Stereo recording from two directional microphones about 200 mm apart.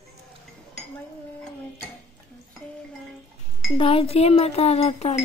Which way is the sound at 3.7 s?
30° left (ahead or behind).